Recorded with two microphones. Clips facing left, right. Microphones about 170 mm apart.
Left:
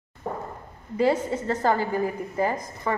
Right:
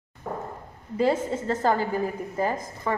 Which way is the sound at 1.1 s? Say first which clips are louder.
Even; 5° right (ahead or behind).